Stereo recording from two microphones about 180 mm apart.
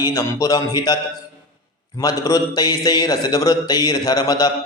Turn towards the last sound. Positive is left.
turn(degrees=20)  # may be behind; listen again after turning